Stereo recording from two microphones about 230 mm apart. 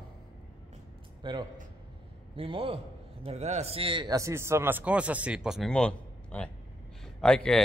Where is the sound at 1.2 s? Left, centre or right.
Centre.